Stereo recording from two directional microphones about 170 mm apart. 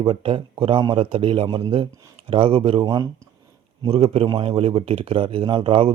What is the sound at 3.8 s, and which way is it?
A man's voice, 35° right (ahead or behind).